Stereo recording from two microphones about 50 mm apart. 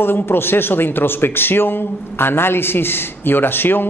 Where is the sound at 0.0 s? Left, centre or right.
Left.